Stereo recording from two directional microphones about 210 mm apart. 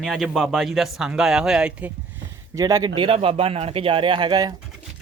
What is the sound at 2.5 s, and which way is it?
Speech, 15° right (ahead or behind).